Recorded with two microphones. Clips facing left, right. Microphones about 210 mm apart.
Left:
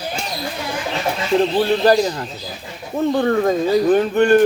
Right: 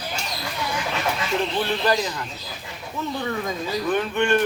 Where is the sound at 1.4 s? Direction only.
35° left (ahead or behind).